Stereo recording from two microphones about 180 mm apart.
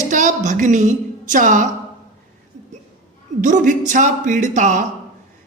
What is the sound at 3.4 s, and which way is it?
A woman's voice, 45° right (ahead or behind).